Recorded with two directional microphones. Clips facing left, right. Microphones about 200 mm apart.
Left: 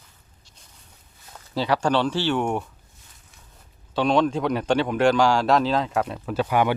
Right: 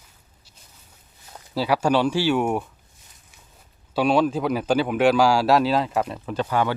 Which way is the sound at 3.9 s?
10° right (ahead or behind).